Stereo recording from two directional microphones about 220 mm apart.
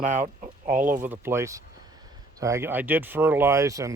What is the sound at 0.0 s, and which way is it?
Speech, 35° right (ahead or behind).